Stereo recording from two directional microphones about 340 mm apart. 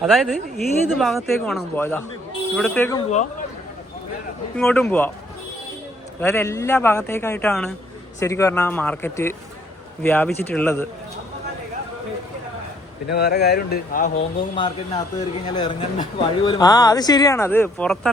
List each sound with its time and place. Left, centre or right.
0.0 s speech: centre
4.5 s speech: centre
6.1 s speech: centre
13.1 s speech: left; by 18.1 s centre